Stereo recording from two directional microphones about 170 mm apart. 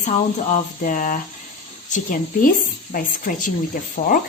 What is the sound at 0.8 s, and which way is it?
A woman's voice, 50° left (ahead or behind).